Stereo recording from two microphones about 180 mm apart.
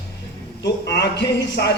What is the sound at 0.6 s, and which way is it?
A man's voice, 70° left (ahead or behind).